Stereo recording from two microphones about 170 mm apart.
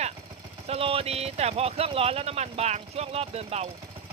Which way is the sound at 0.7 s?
35° right (ahead or behind).